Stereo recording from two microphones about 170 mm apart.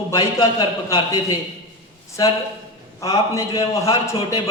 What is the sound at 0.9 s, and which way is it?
A man's voice, 25° left (ahead or behind).